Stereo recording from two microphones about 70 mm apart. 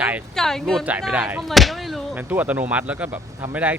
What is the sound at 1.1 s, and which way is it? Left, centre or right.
Speech, right.